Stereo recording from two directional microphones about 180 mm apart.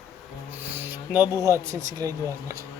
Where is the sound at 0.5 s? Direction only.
10° right (ahead or behind).